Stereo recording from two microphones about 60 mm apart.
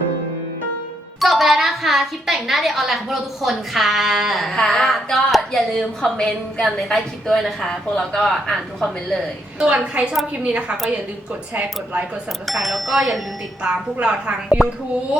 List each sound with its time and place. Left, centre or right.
1.2 s speech: centre
9.6 s a woman's voice: centre
10.1 s a woman's voice: centre
11.5 s a woman's voice: right
12.5 s speech: centre
13.9 s a woman's voice: centre